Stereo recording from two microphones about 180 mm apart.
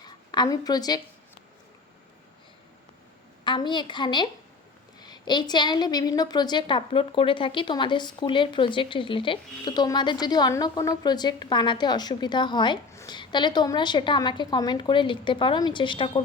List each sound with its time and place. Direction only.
0.0 s a woman's voice: 25° left (ahead or behind)
3.4 s a woman's voice: 25° left (ahead or behind)